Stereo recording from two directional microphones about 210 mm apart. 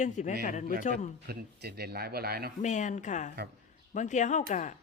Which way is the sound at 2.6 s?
35° left (ahead or behind).